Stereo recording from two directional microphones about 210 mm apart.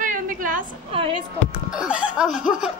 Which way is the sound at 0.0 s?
40° right (ahead or behind).